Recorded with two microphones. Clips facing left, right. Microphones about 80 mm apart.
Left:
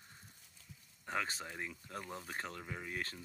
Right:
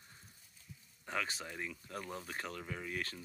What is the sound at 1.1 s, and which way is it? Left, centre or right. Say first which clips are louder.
Speech: even; left.